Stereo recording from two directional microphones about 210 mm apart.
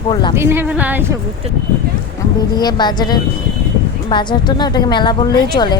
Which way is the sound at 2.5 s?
20° left (ahead or behind).